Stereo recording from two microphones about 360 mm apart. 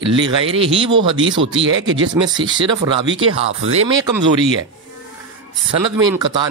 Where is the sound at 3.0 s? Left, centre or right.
Right.